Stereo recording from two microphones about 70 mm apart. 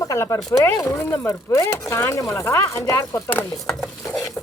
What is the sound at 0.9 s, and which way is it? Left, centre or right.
Speech, left.